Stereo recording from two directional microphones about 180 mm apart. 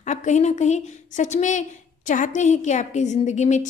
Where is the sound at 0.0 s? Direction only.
40° left (ahead or behind).